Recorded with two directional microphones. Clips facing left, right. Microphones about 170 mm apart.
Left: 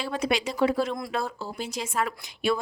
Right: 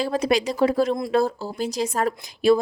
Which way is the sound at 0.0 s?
40° right (ahead or behind).